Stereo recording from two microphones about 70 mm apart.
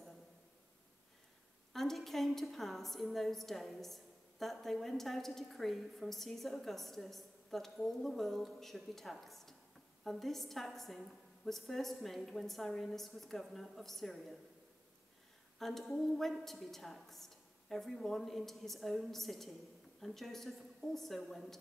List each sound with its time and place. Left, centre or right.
1.7 s a woman's voice: centre
15.6 s a woman's voice: centre